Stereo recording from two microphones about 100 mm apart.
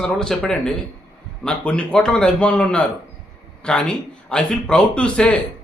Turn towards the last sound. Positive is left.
turn(degrees=10)  # may be behind; listen again after turning